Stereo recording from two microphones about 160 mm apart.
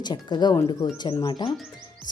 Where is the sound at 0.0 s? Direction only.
25° left (ahead or behind).